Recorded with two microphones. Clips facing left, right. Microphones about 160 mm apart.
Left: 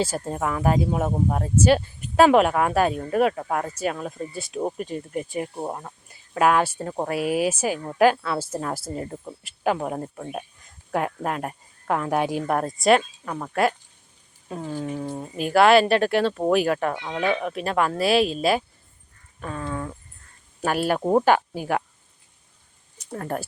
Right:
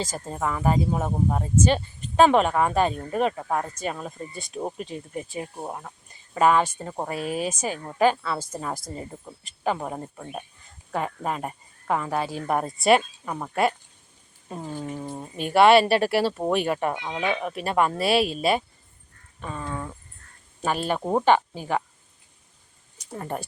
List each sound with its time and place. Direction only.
0.0 s speech: 5° left (ahead or behind)
5.3 s speech: 15° left (ahead or behind)
12.2 s speech: 15° left (ahead or behind)
12.5 s speech: centre (ahead or behind)
16.9 s speech: 15° right (ahead or behind)
17.3 s speech: centre (ahead or behind)
20.6 s speech: 5° left (ahead or behind)
23.1 s speech: 10° right (ahead or behind)